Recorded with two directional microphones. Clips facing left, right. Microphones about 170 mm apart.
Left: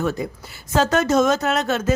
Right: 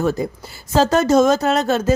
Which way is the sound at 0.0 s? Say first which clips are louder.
Right 4 dB; 35° right (ahead or behind).